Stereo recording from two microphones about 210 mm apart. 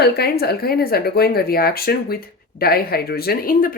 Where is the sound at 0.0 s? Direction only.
50° left (ahead or behind).